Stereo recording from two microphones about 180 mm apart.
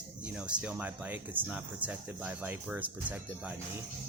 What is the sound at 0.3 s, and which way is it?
Speech, 5° right (ahead or behind).